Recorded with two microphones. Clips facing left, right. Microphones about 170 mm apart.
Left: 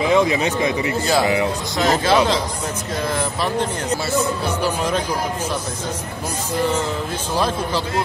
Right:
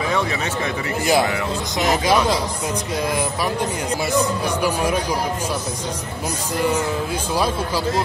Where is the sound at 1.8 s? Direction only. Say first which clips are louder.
Left 2 dB; 15° right (ahead or behind).